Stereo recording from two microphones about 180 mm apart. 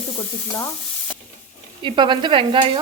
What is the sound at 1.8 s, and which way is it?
Stir, 25° right (ahead or behind).